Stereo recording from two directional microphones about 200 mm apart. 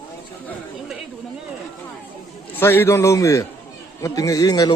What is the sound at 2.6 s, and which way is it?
A man's voice, 10° left (ahead or behind).